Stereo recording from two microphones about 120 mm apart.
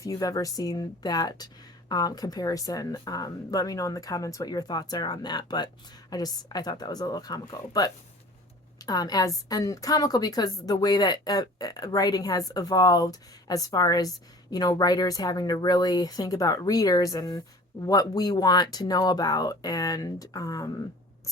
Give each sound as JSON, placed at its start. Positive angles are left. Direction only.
{"t": 0.0, "sound": "speech", "side_deg": 30}